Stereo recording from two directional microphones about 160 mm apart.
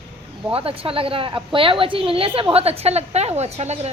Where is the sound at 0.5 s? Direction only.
35° right (ahead or behind).